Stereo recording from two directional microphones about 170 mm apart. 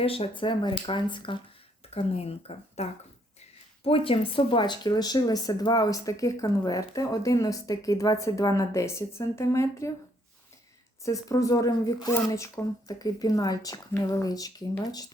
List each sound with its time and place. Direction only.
0.0 s speech: 35° left (ahead or behind); by 9.9 s 15° left (ahead or behind)
11.0 s speech: 20° left (ahead or behind)